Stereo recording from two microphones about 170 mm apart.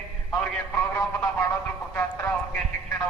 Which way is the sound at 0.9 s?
15° left (ahead or behind).